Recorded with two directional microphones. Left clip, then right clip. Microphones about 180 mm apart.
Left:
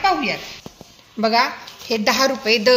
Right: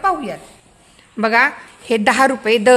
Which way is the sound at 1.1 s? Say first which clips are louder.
Right 3 dB; 35° right (ahead or behind).